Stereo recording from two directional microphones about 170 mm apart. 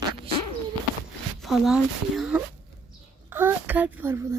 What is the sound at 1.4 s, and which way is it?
Speech, centre (ahead or behind).